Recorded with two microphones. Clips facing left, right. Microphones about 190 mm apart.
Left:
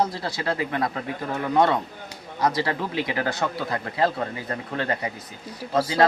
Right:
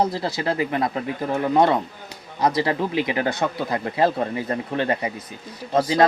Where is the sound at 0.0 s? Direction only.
25° right (ahead or behind).